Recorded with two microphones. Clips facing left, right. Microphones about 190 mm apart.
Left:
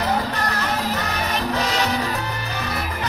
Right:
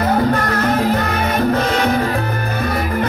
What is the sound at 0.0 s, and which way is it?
Music, 50° right (ahead or behind).